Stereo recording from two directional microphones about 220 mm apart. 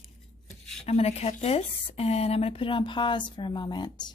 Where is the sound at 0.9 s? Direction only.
30° left (ahead or behind).